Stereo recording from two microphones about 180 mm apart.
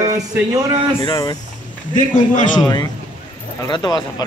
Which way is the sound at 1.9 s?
45° left (ahead or behind).